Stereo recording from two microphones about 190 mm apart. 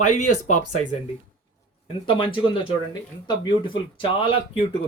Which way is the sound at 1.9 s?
25° left (ahead or behind).